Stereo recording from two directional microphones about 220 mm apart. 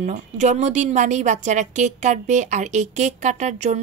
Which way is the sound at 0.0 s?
35° right (ahead or behind).